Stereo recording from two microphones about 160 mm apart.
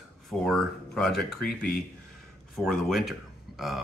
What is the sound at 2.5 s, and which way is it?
Speech, centre (ahead or behind).